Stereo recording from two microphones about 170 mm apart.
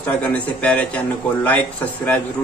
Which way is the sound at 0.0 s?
5° left (ahead or behind).